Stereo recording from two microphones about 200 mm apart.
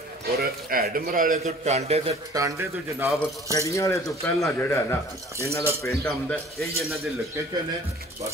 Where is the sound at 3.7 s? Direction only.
15° left (ahead or behind).